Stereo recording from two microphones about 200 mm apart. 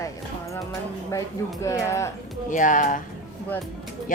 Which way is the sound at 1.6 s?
15° left (ahead or behind).